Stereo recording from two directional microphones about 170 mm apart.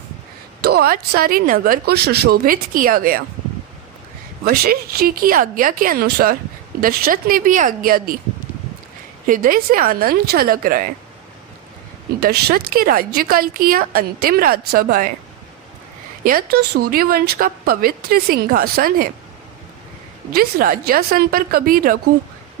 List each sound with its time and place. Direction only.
0.6 s a woman's voice: 65° right (ahead or behind)
4.4 s a woman's voice: 65° right (ahead or behind)
9.2 s a woman's voice: 55° right (ahead or behind)
12.2 s a woman's voice: 65° right (ahead or behind)
16.2 s a woman's voice: 60° right (ahead or behind)
20.3 s a woman's voice: 60° right (ahead or behind)